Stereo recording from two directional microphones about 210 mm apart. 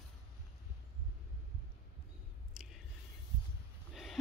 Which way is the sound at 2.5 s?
5° right (ahead or behind).